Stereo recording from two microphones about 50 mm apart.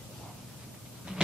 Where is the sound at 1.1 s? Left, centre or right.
Centre.